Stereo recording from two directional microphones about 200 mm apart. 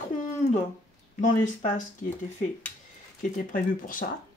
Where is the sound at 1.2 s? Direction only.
40° left (ahead or behind).